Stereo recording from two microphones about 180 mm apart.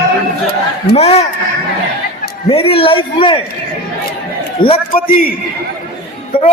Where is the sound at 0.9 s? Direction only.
35° left (ahead or behind).